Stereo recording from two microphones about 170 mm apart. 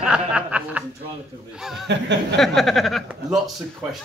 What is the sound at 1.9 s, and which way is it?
Speech, 90° right.